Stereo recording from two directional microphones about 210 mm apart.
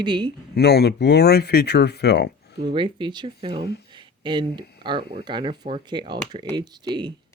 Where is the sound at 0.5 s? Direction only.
50° left (ahead or behind).